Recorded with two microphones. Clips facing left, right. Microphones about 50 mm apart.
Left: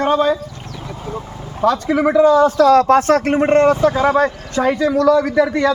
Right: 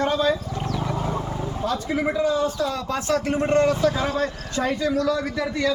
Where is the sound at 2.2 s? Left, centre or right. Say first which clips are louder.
Left 12 dB; left.